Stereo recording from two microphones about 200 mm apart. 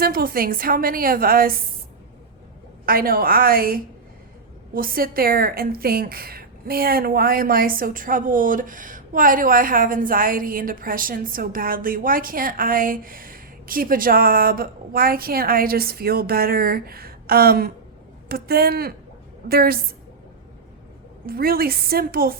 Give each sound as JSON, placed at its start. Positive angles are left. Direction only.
{"t": 0.0, "sound": "a woman's voice", "side_deg": -45}
{"t": 2.8, "sound": "a woman's voice", "side_deg": -45}
{"t": 21.2, "sound": "a woman's voice", "side_deg": -50}